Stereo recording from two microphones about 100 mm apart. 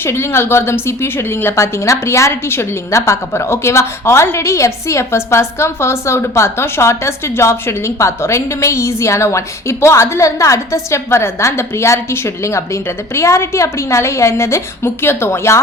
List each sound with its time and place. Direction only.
0.0 s a woman's voice: 25° left (ahead or behind)